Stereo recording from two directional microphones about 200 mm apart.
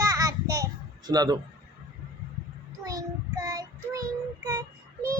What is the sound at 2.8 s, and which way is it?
Child singing, 15° right (ahead or behind).